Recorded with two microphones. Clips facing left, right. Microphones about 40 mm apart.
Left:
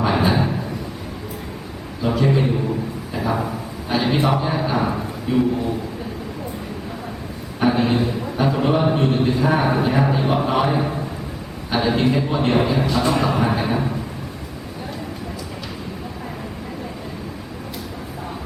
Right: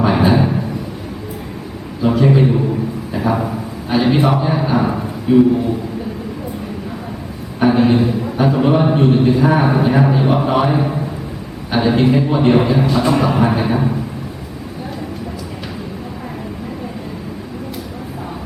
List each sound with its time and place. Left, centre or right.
0.0 s a sound: centre
2.0 s a man's voice: centre
7.6 s a man's voice: centre